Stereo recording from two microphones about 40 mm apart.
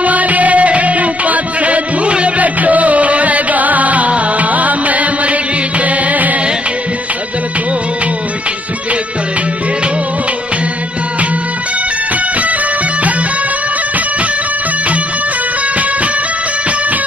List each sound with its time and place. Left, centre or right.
0.0 s music: right